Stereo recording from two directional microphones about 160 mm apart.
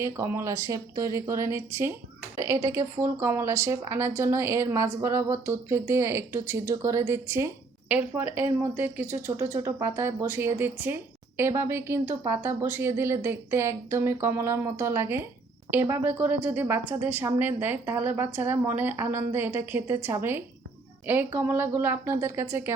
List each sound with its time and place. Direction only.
0.0 s speech: 15° right (ahead or behind)